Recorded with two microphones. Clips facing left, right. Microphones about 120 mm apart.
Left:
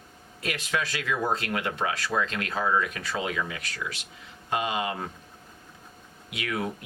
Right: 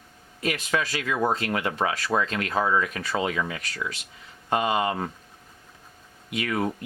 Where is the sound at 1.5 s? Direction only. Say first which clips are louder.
Right 3 dB; 40° right (ahead or behind).